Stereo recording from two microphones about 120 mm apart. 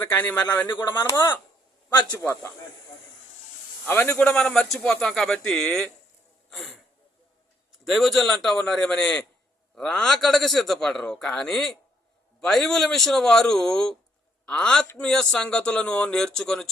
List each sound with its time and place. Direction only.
0.0 s speech: 15° left (ahead or behind)
1.9 s a man's voice: 35° left (ahead or behind)
2.1 s a man's voice: 25° left (ahead or behind)
3.8 s a man's voice: 15° left (ahead or behind)